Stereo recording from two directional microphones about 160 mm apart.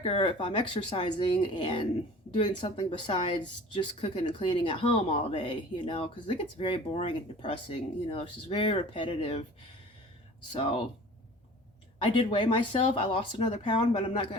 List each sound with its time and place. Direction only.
0.0 s speech: 35° left (ahead or behind)
10.5 s speech: 35° left (ahead or behind)
11.9 s speech: 30° left (ahead or behind)